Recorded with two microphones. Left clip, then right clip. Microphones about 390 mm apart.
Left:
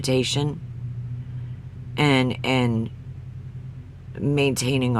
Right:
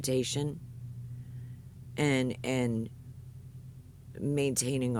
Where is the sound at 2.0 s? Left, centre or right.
Right.